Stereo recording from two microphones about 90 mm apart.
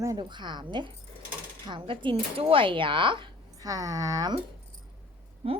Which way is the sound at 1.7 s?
75° right (ahead or behind).